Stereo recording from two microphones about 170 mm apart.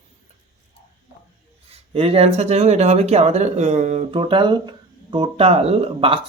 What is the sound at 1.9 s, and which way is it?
Speech, 35° right (ahead or behind).